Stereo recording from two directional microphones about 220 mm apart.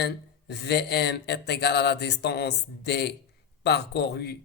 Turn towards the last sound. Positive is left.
turn(degrees=50)  # may be behind; listen again after turning